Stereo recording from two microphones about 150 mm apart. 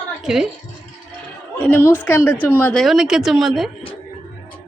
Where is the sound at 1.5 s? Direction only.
10° left (ahead or behind).